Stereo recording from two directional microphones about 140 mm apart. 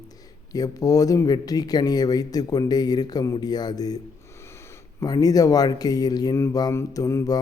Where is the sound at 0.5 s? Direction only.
25° left (ahead or behind).